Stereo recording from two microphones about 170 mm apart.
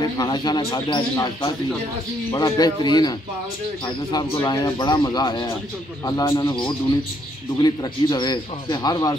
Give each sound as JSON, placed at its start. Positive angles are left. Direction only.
{"t": 0.0, "sound": "speech", "side_deg": 25}